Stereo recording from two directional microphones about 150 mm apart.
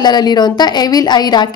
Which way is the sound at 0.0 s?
30° left (ahead or behind).